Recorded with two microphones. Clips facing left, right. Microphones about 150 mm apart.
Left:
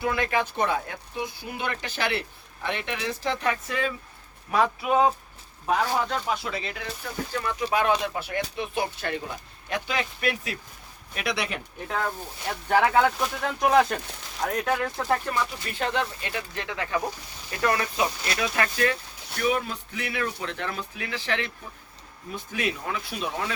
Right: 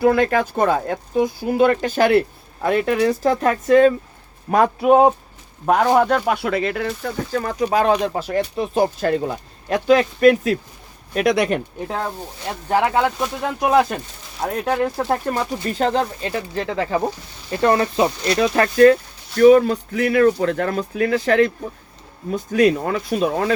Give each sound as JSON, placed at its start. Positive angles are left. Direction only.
{"t": 0.0, "sound": "speech", "side_deg": -50}
{"t": 11.9, "sound": "speech", "side_deg": -25}
{"t": 15.0, "sound": "speech", "side_deg": -40}